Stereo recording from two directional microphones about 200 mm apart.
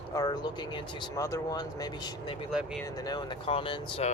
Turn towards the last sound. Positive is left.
turn(degrees=25)  # may be behind; listen again after turning